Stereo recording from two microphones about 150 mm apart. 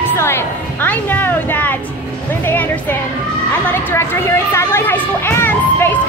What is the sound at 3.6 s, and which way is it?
A child's voice, 15° left (ahead or behind).